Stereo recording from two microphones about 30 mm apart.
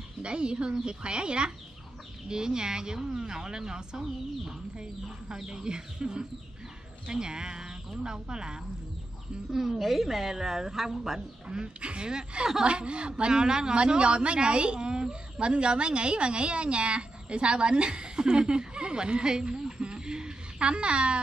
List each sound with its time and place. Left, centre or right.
0.2 s a woman's voice: right
5.3 s speech: right
9.5 s a woman's voice: centre
11.4 s a woman's voice: right
12.6 s a woman's voice: right